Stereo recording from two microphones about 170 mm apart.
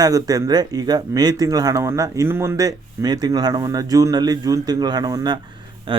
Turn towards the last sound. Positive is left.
turn(degrees=-30)  # may be behind; listen again after turning